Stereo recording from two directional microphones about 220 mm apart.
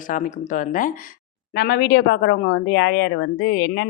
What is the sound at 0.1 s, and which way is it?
A woman's voice, 35° left (ahead or behind).